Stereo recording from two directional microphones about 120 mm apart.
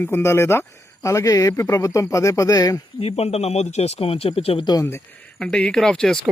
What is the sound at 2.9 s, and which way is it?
Speech, 55° left (ahead or behind).